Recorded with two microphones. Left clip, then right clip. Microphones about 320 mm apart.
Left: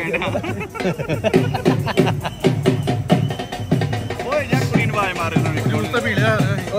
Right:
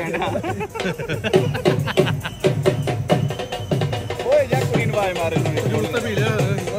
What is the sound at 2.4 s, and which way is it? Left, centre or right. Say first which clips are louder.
Music: right 1 dB; right.